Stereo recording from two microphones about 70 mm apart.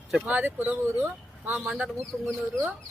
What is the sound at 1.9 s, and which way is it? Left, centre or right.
Speech, centre.